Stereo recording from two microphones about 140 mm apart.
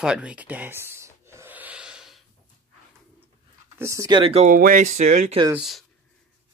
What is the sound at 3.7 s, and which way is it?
Speech, 20° right (ahead or behind).